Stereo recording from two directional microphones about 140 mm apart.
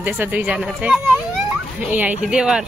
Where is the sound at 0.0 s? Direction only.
10° right (ahead or behind).